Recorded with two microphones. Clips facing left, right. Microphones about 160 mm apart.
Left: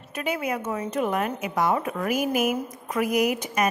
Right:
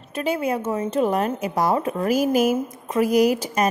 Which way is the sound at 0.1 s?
30° right (ahead or behind).